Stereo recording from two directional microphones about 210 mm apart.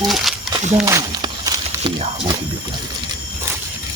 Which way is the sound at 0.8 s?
15° right (ahead or behind).